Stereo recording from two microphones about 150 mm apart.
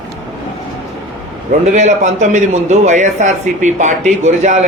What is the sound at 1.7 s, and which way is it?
A man's voice, 50° right (ahead or behind).